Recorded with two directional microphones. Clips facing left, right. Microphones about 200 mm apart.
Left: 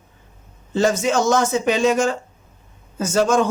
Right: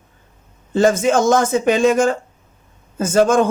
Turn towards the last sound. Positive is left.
turn(degrees=-50)  # may be behind; listen again after turning